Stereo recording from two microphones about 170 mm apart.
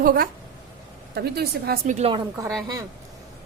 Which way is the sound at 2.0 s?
35° right (ahead or behind).